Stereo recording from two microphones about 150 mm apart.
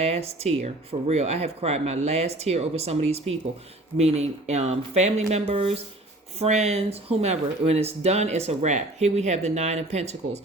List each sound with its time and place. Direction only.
0.0 s speech: 45° right (ahead or behind)